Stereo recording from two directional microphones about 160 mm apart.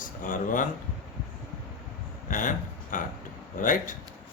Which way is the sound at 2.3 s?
55° left (ahead or behind).